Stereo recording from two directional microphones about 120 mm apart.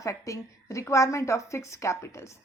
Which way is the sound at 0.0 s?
25° left (ahead or behind).